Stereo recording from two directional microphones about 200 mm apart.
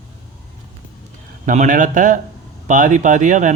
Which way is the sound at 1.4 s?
40° right (ahead or behind).